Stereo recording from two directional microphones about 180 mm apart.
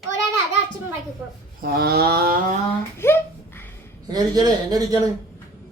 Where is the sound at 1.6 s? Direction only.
55° right (ahead or behind).